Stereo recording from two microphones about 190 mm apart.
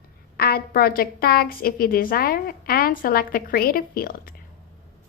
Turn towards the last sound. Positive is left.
turn(degrees=50)  # may be behind; listen again after turning